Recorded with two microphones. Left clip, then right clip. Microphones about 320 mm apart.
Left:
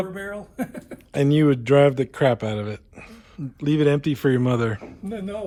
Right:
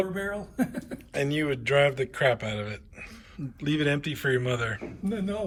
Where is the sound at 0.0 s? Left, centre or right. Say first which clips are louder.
Even; centre.